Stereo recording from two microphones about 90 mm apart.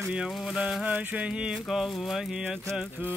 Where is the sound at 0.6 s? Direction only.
10° right (ahead or behind).